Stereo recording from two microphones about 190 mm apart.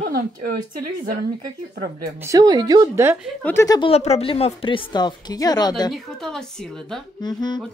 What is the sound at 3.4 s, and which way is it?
Speech, 10° left (ahead or behind).